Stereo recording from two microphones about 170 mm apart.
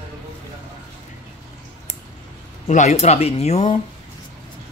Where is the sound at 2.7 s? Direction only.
40° left (ahead or behind).